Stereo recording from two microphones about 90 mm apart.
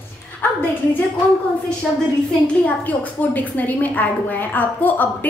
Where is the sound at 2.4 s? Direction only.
15° left (ahead or behind).